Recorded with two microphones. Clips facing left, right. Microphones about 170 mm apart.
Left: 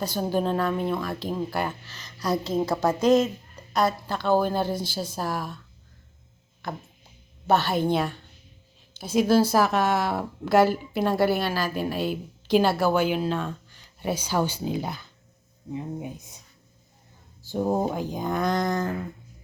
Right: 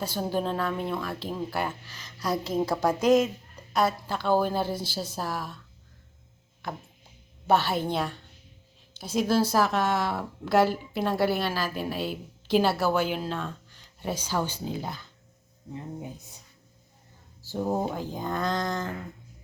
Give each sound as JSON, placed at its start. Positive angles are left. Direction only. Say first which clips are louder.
{"t": 0.0, "sound": "a woman's voice", "louder": "left 3 dB", "side_deg": 0}
{"t": 0.9, "sound": "speech", "louder": "left 3 dB", "side_deg": 10}
{"t": 1.3, "sound": "a woman's voice", "louder": "left 2 dB", "side_deg": -5}
{"t": 6.6, "sound": "a woman's voice", "louder": "left 2 dB", "side_deg": -10}
{"t": 14.6, "sound": "speech", "louder": "left 4 dB", "side_deg": 15}
{"t": 17.5, "sound": "speech", "louder": "left 3 dB", "side_deg": 15}